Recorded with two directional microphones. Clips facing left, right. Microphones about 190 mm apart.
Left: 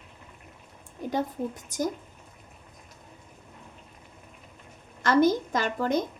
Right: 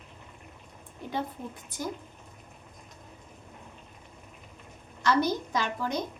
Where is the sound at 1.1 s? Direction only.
45° left (ahead or behind).